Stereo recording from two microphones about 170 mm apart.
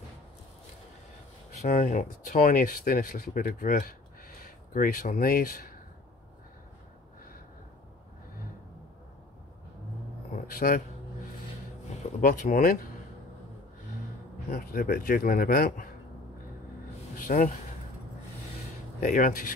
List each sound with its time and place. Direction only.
1.6 s speech: 45° left (ahead or behind)
2.2 s speech: 60° left (ahead or behind)
10.3 s a sound: 60° left (ahead or behind)
12.2 s speech: 50° left (ahead or behind)
14.5 s speech: 60° left (ahead or behind)
17.2 s a sound: 50° left (ahead or behind)
18.9 s speech: 50° left (ahead or behind)